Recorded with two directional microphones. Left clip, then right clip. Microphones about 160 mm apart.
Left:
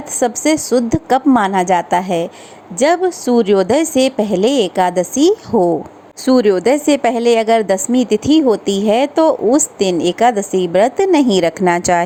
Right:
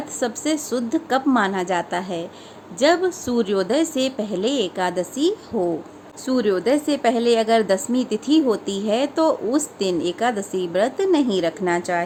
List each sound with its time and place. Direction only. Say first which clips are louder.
0.2 s a woman's voice: left 9 dB; 35° left (ahead or behind); by 12.0 s 50° left (ahead or behind)